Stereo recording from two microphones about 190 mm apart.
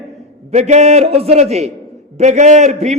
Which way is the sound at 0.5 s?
35° right (ahead or behind).